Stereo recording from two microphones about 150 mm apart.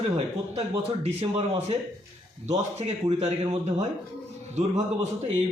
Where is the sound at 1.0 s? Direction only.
45° right (ahead or behind).